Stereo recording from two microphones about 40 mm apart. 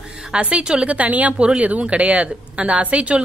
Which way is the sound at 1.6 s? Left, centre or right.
Right.